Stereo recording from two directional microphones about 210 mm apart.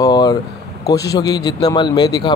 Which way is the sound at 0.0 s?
20° left (ahead or behind).